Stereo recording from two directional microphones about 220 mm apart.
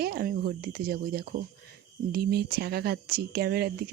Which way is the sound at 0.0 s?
45° right (ahead or behind).